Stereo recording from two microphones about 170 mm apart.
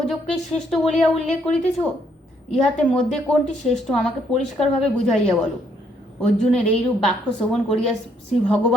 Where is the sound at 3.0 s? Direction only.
5° left (ahead or behind).